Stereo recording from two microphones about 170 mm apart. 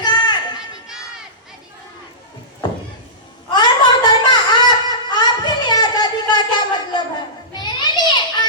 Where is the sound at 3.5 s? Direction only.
25° left (ahead or behind).